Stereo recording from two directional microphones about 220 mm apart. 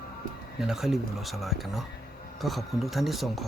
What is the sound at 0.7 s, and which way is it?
Speech, centre (ahead or behind).